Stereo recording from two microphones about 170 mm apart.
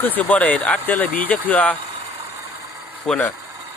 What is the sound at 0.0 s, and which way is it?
Speech, 10° left (ahead or behind).